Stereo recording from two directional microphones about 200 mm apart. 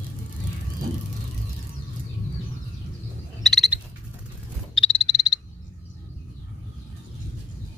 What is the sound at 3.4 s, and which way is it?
Frog, centre (ahead or behind).